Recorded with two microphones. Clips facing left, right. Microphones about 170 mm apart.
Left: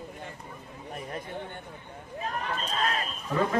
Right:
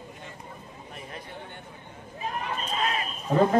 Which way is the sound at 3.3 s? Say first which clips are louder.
Right 6 dB; 30° right (ahead or behind).